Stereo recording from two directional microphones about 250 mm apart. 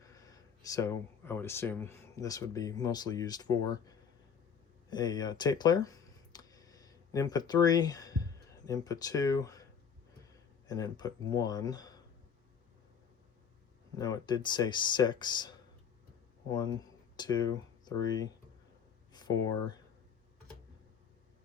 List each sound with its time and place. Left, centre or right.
0.0 s speech: centre
10.7 s speech: centre
13.9 s speech: centre
17.2 s speech: centre